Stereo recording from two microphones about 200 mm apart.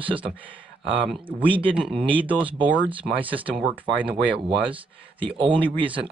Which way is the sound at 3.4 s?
5° right (ahead or behind).